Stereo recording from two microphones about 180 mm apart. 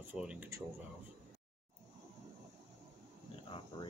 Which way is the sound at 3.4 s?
30° left (ahead or behind).